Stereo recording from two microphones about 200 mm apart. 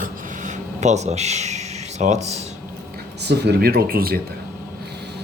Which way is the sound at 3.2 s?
55° right (ahead or behind).